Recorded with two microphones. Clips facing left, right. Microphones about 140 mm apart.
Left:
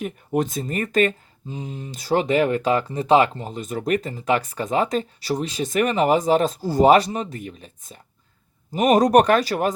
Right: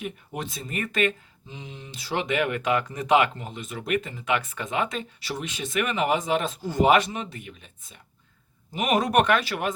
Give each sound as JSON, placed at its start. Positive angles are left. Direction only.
{"t": 0.0, "sound": "speech", "side_deg": 45}